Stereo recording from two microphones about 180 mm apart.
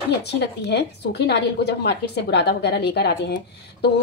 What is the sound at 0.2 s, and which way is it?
Speech, 65° left (ahead or behind).